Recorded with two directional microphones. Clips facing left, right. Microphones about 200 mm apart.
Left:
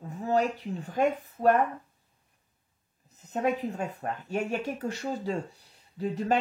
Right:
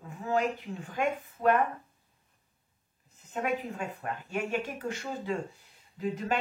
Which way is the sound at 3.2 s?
40° left (ahead or behind).